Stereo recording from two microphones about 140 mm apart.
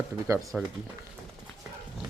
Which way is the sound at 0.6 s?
10° right (ahead or behind).